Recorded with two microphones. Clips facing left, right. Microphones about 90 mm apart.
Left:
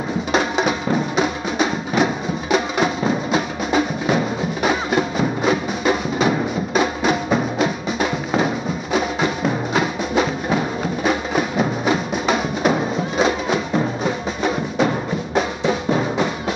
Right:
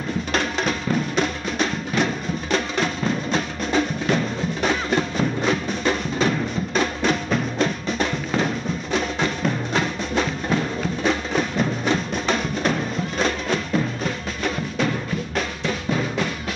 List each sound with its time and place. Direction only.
0.3 s music: 10° left (ahead or behind)
14.0 s music: 10° left (ahead or behind)
15.9 s music: 25° left (ahead or behind)